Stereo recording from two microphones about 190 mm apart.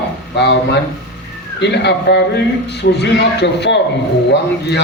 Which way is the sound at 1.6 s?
65° left (ahead or behind).